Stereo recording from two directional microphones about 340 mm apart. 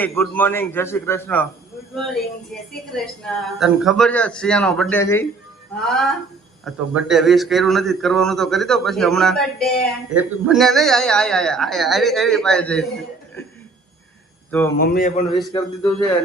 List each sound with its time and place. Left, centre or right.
0.0 s a man's voice: centre
14.8 s speech: left
15.5 s a man's voice: centre